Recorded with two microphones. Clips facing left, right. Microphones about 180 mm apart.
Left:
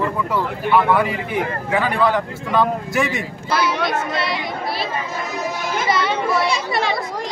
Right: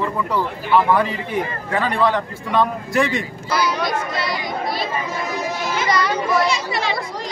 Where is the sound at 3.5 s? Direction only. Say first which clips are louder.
Left 1 dB; 25° left (ahead or behind).